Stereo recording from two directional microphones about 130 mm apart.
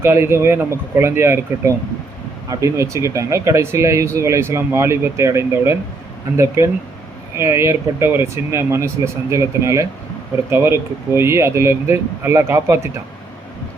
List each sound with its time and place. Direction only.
0.0 s speech: 20° right (ahead or behind)